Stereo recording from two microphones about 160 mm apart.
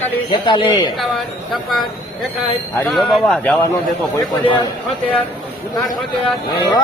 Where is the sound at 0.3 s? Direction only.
30° left (ahead or behind).